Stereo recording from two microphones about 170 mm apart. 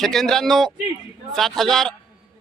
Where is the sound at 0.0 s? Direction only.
Centre (ahead or behind).